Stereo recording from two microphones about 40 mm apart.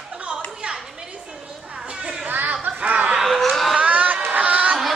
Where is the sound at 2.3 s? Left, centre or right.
Right.